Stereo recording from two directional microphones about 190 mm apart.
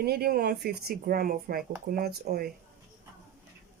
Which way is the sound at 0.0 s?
55° right (ahead or behind).